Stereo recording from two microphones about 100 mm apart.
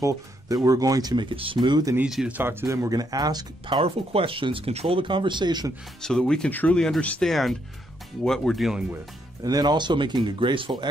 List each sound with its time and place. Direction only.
0.0 s speech: 30° right (ahead or behind); by 1.9 s 50° right (ahead or behind)
2.0 s speech: 5° right (ahead or behind)
2.3 s speech: 25° right (ahead or behind); by 3.8 s 45° right (ahead or behind)
3.8 s speech: 70° right (ahead or behind); by 5.7 s 45° right (ahead or behind)
6.0 s speech: 10° left (ahead or behind)
9.4 s speech: 40° right (ahead or behind); by 10.7 s 55° right (ahead or behind)